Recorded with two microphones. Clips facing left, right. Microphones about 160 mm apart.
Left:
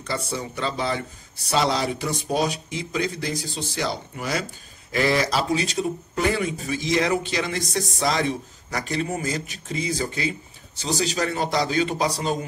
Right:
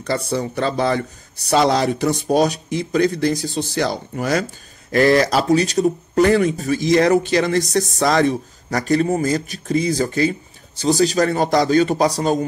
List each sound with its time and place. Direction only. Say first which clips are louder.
0.4 s speech: right 7 dB; 45° right (ahead or behind)
3.7 s speech: right 5 dB; 55° right (ahead or behind)